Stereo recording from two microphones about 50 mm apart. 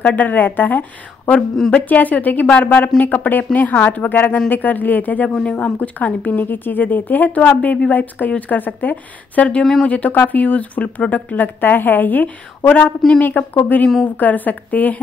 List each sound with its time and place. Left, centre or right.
0.0 s a woman's voice: left
5.3 s a woman's voice: left
9.6 s speech: centre
9.8 s a woman's voice: left